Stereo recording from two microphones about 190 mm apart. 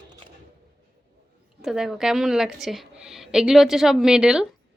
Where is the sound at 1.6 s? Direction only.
Centre (ahead or behind).